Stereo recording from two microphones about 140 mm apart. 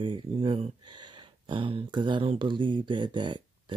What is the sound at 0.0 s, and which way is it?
Speech, 40° right (ahead or behind).